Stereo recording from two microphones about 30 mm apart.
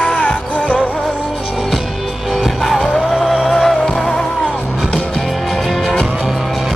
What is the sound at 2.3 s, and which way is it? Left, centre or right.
Music, centre.